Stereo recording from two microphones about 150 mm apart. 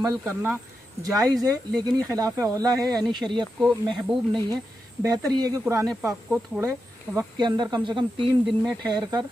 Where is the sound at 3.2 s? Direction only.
5° right (ahead or behind).